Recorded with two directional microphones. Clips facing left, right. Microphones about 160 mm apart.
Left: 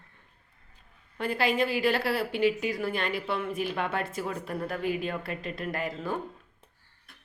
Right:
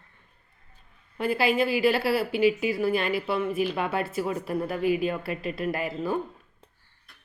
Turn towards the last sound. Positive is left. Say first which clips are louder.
# right 4 dB
turn(degrees=-5)  # may be behind; listen again after turning